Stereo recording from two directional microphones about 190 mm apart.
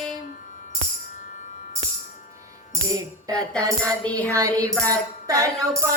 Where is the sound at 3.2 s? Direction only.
20° right (ahead or behind).